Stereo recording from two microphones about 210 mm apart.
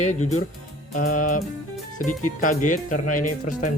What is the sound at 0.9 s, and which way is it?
Speech, 40° left (ahead or behind).